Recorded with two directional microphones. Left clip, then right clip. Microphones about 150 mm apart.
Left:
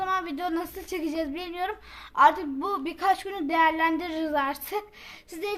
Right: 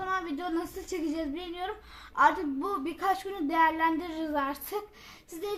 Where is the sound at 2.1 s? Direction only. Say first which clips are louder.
Left 4 dB; 30° left (ahead or behind).